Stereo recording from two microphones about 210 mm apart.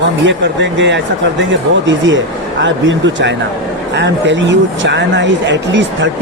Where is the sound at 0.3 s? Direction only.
60° right (ahead or behind).